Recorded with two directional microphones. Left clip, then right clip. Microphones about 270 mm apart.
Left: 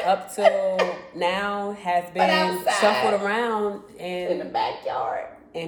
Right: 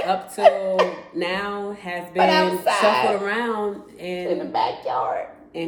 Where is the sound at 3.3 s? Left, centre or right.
Centre.